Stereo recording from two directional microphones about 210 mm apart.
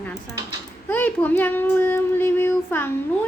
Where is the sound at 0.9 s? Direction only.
10° left (ahead or behind).